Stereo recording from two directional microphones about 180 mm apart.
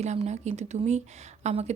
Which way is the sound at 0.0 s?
40° right (ahead or behind).